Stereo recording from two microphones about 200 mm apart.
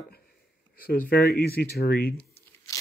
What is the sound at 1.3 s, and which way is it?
Speech, 50° left (ahead or behind).